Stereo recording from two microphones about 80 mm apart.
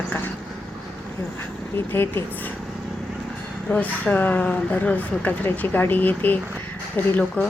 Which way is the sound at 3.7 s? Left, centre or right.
Centre.